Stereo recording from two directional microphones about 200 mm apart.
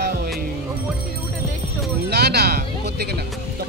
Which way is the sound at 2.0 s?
55° right (ahead or behind).